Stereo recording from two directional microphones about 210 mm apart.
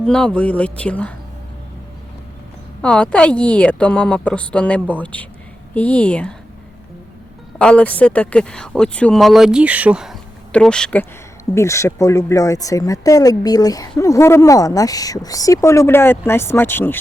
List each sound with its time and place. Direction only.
0.0 s speech: 5° left (ahead or behind)
2.8 s speech: 5° left (ahead or behind)
7.6 s speech: 5° left (ahead or behind)